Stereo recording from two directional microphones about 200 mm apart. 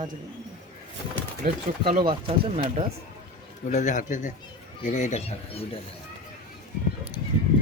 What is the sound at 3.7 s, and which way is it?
Speech, 40° left (ahead or behind).